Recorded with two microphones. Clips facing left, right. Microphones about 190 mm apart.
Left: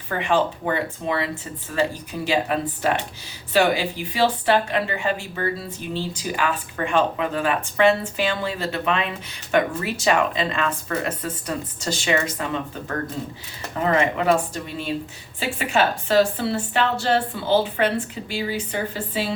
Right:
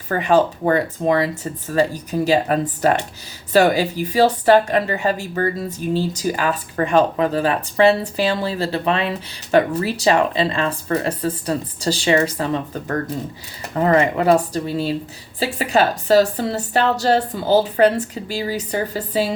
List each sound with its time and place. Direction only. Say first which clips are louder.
0.1 s a woman's voice: right 5 dB; 40° right (ahead or behind)
13.8 s a woman's voice: right 4 dB; 40° right (ahead or behind)